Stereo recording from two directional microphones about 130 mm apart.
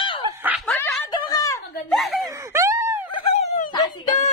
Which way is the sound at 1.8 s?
Centre (ahead or behind).